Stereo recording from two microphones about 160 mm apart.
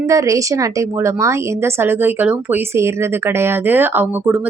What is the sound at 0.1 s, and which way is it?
A woman's voice, 20° right (ahead or behind).